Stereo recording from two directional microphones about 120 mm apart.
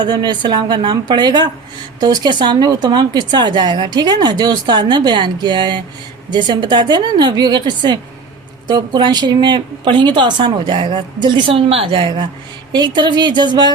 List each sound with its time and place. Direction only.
0.0 s speech: 40° right (ahead or behind)